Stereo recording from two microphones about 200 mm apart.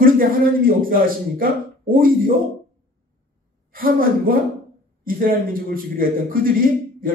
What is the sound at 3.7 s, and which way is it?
A man's voice, 45° right (ahead or behind).